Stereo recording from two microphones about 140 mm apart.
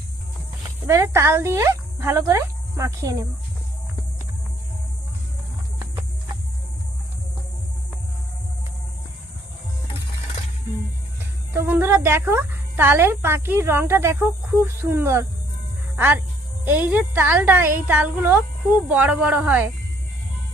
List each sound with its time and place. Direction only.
0.9 s speech: 20° right (ahead or behind)
11.5 s speech: 15° right (ahead or behind)